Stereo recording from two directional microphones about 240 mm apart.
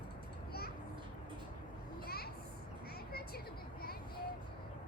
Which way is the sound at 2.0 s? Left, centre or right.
Left.